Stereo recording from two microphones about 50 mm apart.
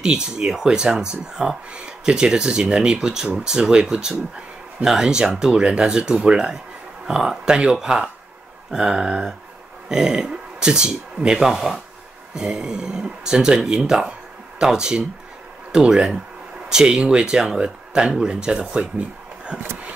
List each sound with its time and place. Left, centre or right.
0.0 s speech: centre